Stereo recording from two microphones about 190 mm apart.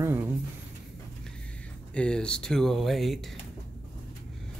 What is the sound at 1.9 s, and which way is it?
Speech, 5° left (ahead or behind).